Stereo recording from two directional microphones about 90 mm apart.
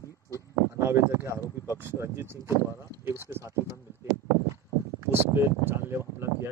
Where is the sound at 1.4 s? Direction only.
40° left (ahead or behind).